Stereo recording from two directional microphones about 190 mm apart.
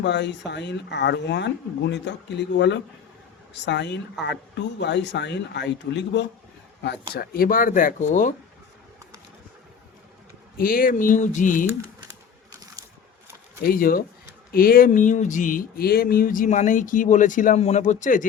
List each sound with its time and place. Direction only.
0.0 s speech: 65° left (ahead or behind)
7.1 s speech: 55° left (ahead or behind)
10.6 s speech: 50° left (ahead or behind)
13.7 s speech: 50° left (ahead or behind)